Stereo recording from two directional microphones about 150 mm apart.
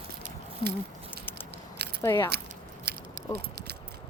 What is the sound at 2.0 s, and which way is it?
Speech, 15° left (ahead or behind).